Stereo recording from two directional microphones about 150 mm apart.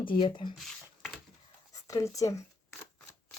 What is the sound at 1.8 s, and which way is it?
Speech, 20° left (ahead or behind).